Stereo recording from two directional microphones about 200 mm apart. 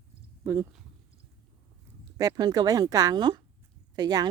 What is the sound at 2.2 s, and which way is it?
Speech, 20° right (ahead or behind).